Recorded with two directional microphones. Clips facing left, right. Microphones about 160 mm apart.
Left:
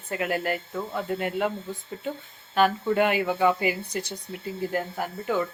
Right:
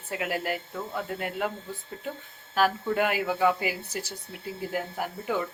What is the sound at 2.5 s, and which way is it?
Speech, centre (ahead or behind).